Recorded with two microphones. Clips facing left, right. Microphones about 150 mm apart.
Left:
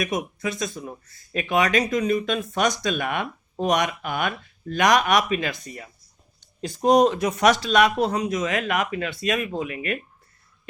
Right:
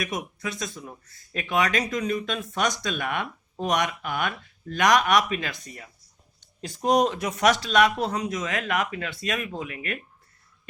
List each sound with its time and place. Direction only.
0.0 s speech: 15° left (ahead or behind)
6.6 s speech: 30° left (ahead or behind); by 10.0 s 15° left (ahead or behind)